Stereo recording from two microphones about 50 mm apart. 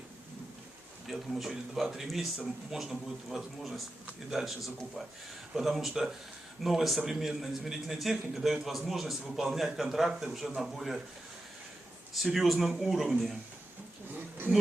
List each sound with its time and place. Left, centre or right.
1.0 s speech: centre
12.1 s speech: centre
14.1 s a sound: right